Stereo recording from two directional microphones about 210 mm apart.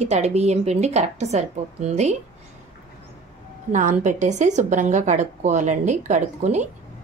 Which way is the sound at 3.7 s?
35° right (ahead or behind).